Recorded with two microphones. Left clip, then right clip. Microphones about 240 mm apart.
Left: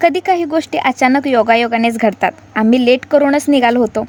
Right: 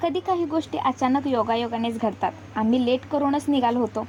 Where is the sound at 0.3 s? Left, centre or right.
Left.